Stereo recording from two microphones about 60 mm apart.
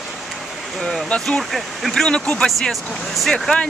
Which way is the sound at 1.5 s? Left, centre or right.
Centre.